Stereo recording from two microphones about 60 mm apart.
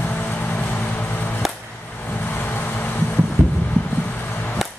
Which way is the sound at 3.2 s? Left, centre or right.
Left.